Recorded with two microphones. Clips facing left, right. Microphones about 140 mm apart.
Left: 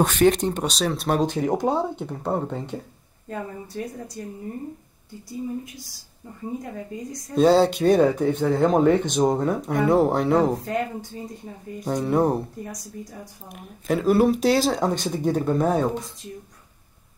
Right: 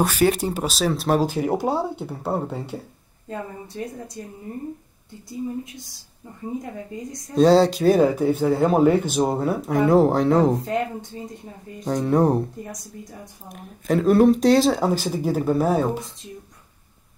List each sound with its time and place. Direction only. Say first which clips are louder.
0.0 s speech: left 1 dB; 5° right (ahead or behind)
3.3 s a woman's voice: even; 20° right (ahead or behind)
7.3 s speech: right 2 dB; centre (ahead or behind)
10.6 s a woman's voice: right 2 dB; 25° right (ahead or behind)
11.8 s speech: right 2 dB; centre (ahead or behind)
13.5 s speech: right 2 dB; centre (ahead or behind)